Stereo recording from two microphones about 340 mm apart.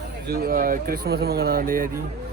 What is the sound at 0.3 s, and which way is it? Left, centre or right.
Speech, right.